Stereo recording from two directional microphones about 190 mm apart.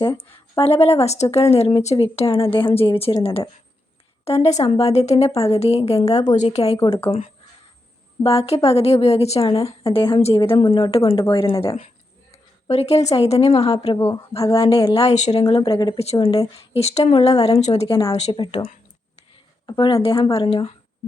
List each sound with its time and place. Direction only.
0.6 s a woman's voice: 30° left (ahead or behind)
12.3 s a sound: 35° left (ahead or behind)
13.1 s a woman's voice: 30° left (ahead or behind)
19.6 s a woman's voice: 25° left (ahead or behind)